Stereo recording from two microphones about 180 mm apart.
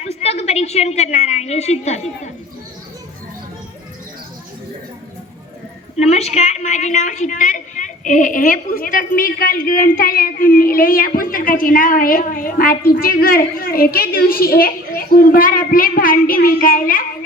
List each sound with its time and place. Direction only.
0.0 s a woman's voice: 35° left (ahead or behind)
6.0 s a woman's voice: 35° left (ahead or behind)